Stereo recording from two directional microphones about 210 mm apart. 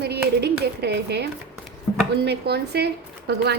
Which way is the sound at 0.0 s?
50° right (ahead or behind).